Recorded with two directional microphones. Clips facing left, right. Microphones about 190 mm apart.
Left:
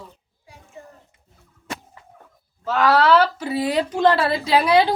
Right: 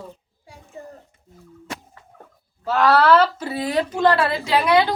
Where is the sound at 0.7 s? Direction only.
35° right (ahead or behind).